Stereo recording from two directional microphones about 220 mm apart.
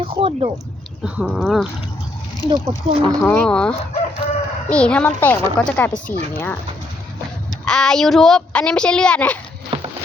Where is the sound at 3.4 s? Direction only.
5° left (ahead or behind).